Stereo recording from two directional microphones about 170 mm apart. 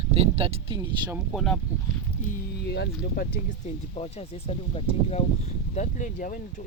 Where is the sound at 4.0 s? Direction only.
35° left (ahead or behind).